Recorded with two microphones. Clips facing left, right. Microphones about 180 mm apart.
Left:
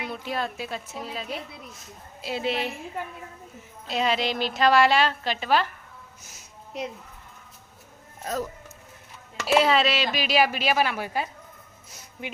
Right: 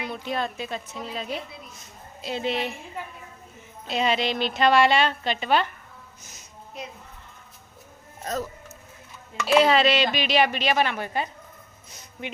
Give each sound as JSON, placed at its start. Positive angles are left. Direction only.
{"t": 0.0, "sound": "a woman's voice", "side_deg": 5}
{"t": 3.8, "sound": "a woman's voice", "side_deg": 0}
{"t": 8.2, "sound": "speech", "side_deg": 10}
{"t": 9.5, "sound": "a woman's voice", "side_deg": 0}